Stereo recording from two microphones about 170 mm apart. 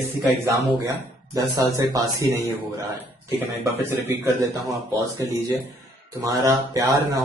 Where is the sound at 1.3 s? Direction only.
20° right (ahead or behind).